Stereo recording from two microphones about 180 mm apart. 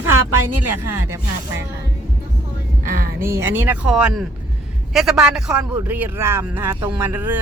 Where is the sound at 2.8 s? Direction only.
50° right (ahead or behind).